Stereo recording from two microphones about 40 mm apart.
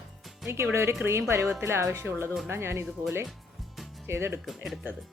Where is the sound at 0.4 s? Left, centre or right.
Right.